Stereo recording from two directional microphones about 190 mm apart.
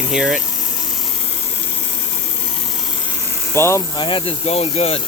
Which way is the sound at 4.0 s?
25° left (ahead or behind).